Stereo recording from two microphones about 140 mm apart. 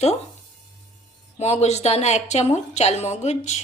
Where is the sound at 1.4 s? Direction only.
50° left (ahead or behind).